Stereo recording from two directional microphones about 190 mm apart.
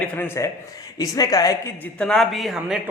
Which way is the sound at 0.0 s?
10° left (ahead or behind).